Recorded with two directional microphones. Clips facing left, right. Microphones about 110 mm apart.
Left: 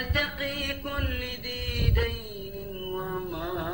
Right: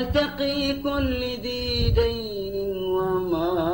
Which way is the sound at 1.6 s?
25° right (ahead or behind).